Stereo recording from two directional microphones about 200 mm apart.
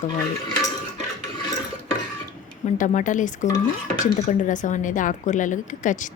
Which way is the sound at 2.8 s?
40° left (ahead or behind).